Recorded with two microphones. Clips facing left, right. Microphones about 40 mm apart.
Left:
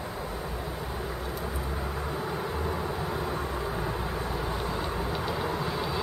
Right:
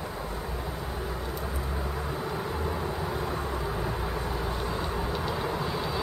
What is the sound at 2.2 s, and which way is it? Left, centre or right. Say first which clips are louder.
Vehicle: even; centre.